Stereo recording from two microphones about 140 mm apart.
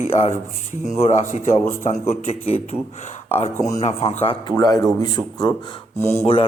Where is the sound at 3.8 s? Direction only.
50° left (ahead or behind).